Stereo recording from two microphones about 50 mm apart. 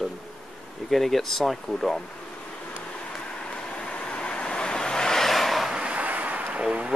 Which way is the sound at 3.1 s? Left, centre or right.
Centre.